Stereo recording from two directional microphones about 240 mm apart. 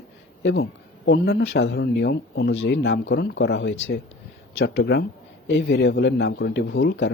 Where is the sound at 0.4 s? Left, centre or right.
Left.